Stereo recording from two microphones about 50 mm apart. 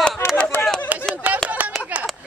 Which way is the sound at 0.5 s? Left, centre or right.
Left.